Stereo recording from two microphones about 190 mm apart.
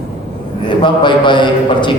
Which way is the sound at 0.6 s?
25° left (ahead or behind).